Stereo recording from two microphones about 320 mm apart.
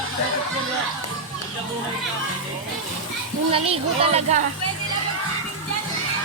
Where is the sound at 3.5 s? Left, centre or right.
Centre.